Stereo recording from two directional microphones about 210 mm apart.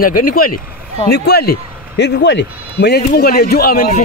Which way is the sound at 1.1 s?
50° left (ahead or behind).